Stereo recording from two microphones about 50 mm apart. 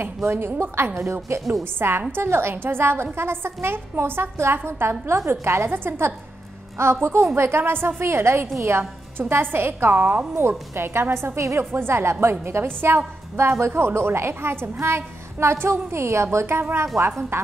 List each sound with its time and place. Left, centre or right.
0.2 s a woman's voice: right
9.9 s a woman's voice: right
10.7 s a woman's voice: right
11.7 s a woman's voice: right